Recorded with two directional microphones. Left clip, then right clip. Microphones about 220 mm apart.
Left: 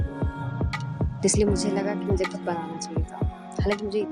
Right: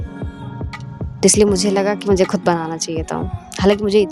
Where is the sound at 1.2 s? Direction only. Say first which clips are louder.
Right 10 dB; 40° right (ahead or behind).